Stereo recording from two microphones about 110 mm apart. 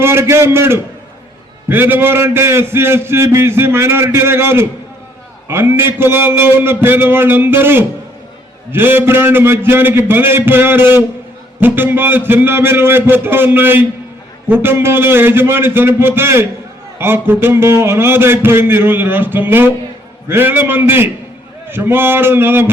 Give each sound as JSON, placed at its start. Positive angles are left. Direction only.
{"t": 0.0, "sound": "a man's voice", "side_deg": -25}